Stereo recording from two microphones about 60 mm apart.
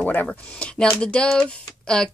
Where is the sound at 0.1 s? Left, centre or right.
Left.